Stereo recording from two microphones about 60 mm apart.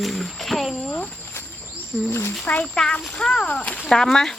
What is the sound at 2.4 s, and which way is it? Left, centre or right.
Speech, left.